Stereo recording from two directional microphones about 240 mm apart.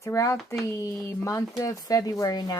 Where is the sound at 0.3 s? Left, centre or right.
Centre.